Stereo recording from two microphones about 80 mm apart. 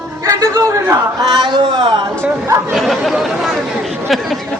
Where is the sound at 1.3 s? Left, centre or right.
Right.